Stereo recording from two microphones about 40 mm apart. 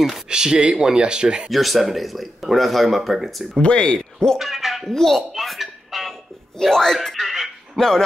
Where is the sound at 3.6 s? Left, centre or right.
Left.